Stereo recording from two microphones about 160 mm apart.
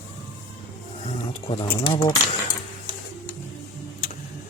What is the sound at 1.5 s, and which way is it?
Speech, 35° left (ahead or behind).